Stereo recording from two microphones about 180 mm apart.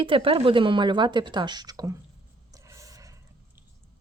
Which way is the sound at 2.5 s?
15° right (ahead or behind).